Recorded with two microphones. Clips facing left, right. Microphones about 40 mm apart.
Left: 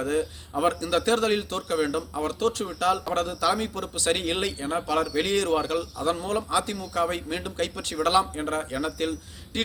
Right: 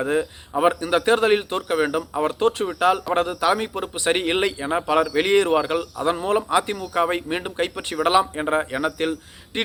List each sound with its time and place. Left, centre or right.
0.0 s a man's voice: right